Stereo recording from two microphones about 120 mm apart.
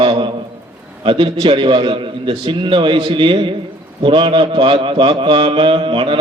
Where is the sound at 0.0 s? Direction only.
45° right (ahead or behind).